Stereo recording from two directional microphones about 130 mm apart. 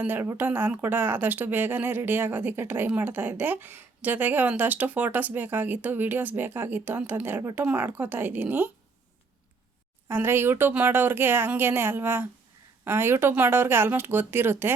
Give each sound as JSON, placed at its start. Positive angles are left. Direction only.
{"t": 0.0, "sound": "speech", "side_deg": -15}
{"t": 10.1, "sound": "speech", "side_deg": -20}